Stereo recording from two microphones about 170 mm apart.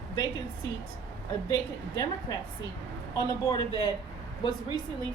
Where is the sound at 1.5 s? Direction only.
20° left (ahead or behind).